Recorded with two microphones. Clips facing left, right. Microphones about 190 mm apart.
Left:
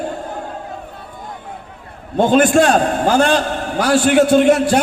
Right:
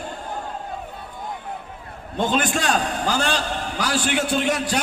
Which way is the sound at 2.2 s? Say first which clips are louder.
Left 10 dB; 50° left (ahead or behind).